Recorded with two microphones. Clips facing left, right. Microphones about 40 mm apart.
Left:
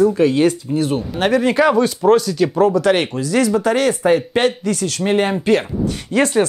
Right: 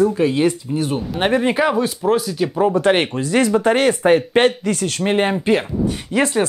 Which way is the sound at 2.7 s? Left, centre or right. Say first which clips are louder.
Even; right.